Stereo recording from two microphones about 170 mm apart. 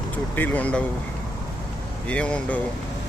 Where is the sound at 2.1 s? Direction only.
5° left (ahead or behind).